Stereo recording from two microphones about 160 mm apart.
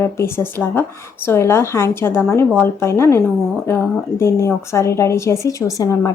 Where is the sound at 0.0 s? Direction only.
15° left (ahead or behind).